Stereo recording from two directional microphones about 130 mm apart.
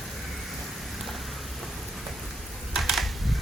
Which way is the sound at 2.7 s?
Centre (ahead or behind).